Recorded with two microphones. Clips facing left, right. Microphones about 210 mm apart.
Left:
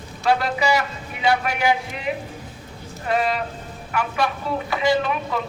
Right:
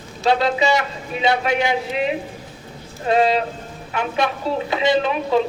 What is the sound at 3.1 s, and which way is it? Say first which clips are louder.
A woman's voice: right 5 dB; 25° right (ahead or behind).